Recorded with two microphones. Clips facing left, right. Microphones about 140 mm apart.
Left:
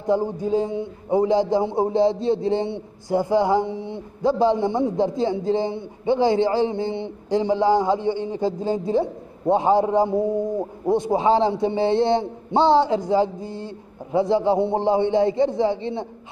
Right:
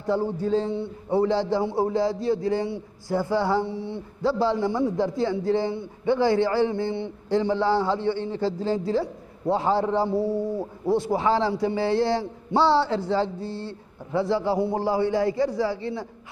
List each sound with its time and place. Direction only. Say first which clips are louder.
0.0 s a man's voice: left 3 dB; 15° left (ahead or behind)